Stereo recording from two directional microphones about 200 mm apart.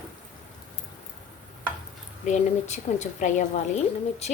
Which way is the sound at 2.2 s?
35° left (ahead or behind).